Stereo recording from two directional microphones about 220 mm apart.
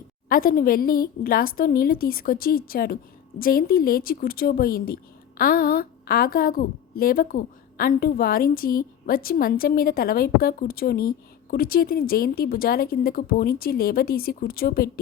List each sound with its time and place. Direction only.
0.3 s a woman's voice: 40° left (ahead or behind)